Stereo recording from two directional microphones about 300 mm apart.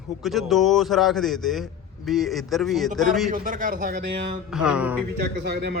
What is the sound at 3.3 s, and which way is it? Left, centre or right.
Speech, right.